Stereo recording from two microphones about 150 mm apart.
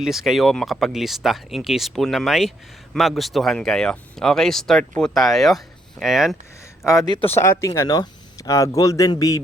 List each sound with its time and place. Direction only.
0.0 s speech: 5° right (ahead or behind)
7.1 s speech: 35° left (ahead or behind)
7.3 s speech: 15° left (ahead or behind)